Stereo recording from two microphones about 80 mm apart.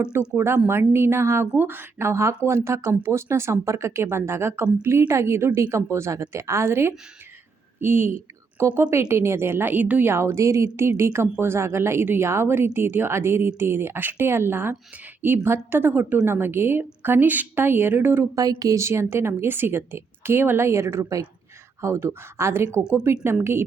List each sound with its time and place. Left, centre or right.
0.3 s a woman's voice: right
18.3 s speech: right
18.8 s a woman's voice: right